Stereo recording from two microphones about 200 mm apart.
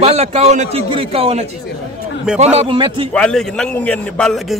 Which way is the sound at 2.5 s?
25° right (ahead or behind).